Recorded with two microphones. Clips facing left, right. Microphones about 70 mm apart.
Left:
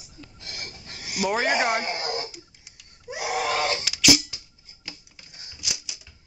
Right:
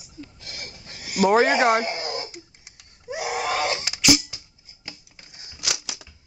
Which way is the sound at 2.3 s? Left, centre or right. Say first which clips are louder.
Right 3 dB; right.